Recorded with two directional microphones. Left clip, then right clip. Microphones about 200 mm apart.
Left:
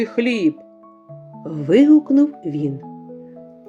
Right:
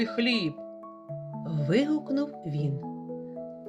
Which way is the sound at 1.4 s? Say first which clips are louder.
Left 13 dB; 35° left (ahead or behind).